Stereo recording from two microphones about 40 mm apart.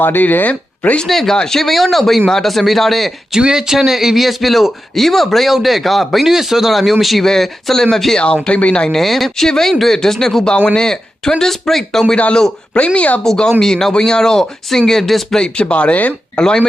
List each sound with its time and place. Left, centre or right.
0.0 s speech: left
1.0 s a man's voice: centre
3.5 s a man's voice: centre
8.2 s speech: left
8.9 s a man's voice: centre
12.1 s speech: left
13.2 s speech: centre
15.4 s speech: left
16.4 s speech: left